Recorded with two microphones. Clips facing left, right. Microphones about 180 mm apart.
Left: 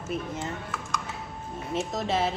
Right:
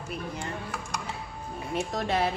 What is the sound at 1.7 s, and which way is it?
Speech, centre (ahead or behind).